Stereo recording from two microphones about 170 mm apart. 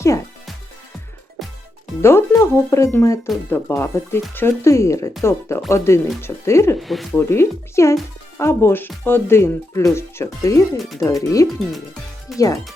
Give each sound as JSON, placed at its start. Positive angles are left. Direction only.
{"t": 2.0, "sound": "speech", "side_deg": 15}
{"t": 6.7, "sound": "speech", "side_deg": 0}
{"t": 7.2, "sound": "speech", "side_deg": 15}
{"t": 12.3, "sound": "speech", "side_deg": 0}